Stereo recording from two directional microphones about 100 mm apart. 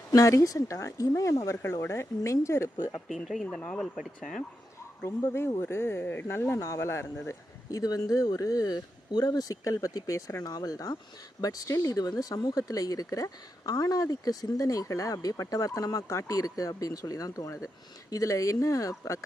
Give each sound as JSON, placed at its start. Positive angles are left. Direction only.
{"t": 0.1, "sound": "speech", "side_deg": 35}
{"t": 2.7, "sound": "speech", "side_deg": 45}
{"t": 3.1, "sound": "speech", "side_deg": 0}
{"t": 3.9, "sound": "speech", "side_deg": -5}
{"t": 5.0, "sound": "speech", "side_deg": 25}